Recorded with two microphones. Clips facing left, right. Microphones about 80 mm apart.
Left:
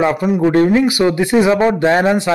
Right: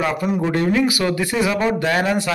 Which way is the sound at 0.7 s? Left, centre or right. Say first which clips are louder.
Left 5 dB; left.